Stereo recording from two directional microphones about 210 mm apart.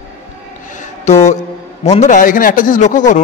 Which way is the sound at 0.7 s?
30° left (ahead or behind).